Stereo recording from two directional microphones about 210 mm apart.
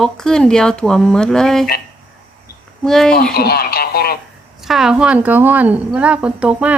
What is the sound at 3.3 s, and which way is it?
Speech, 45° left (ahead or behind).